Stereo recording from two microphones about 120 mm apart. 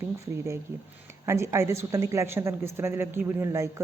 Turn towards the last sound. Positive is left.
turn(degrees=-25)  # may be behind; listen again after turning